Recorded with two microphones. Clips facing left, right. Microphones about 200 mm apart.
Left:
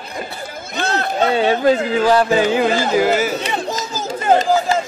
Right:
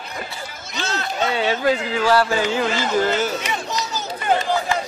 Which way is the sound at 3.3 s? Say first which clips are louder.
Left 4 dB; 35° left (ahead or behind).